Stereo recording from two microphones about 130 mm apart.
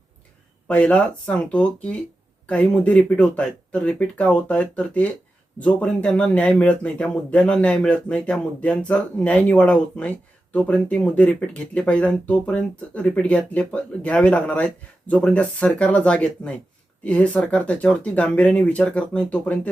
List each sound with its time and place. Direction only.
0.7 s a man's voice: 10° left (ahead or behind)